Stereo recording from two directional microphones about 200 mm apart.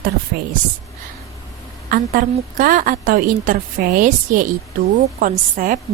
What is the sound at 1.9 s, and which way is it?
A woman's voice, 45° right (ahead or behind).